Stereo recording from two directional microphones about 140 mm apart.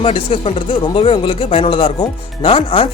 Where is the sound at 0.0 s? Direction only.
45° left (ahead or behind).